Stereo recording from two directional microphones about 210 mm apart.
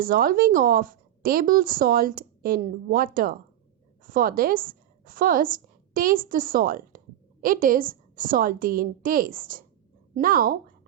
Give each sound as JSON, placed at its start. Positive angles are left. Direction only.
{"t": 0.0, "sound": "a woman's voice", "side_deg": -40}